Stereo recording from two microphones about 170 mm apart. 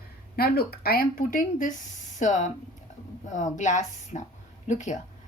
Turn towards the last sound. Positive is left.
turn(degrees=45)  # may be behind; listen again after turning